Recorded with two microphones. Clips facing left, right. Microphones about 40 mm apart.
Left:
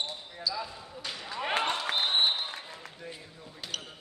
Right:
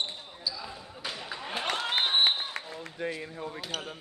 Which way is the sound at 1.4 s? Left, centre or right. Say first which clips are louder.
Left 7 dB; left.